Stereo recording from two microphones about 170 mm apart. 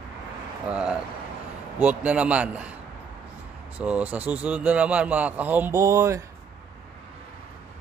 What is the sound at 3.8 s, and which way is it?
Speech, 10° right (ahead or behind).